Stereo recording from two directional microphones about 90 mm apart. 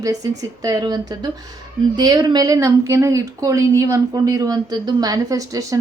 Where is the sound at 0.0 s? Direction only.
45° right (ahead or behind).